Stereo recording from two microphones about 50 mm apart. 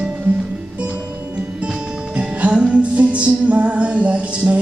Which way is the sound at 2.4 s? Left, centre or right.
Right.